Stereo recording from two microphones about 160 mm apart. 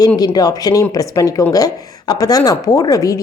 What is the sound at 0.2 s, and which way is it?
Speech, 25° left (ahead or behind).